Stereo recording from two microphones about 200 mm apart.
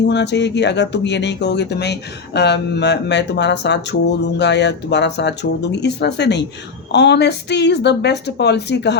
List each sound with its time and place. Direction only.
0.0 s speech: 60° left (ahead or behind)